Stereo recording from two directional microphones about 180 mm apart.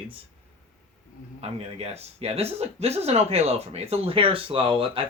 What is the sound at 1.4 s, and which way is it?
Speech, 35° right (ahead or behind).